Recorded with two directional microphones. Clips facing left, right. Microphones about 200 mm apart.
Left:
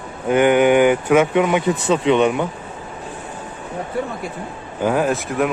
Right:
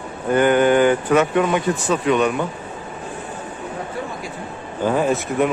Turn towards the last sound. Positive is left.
turn(degrees=0)  # may be behind; listen again after turning